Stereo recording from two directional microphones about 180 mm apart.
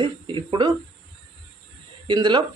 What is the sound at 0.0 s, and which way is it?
Speech, 25° right (ahead or behind).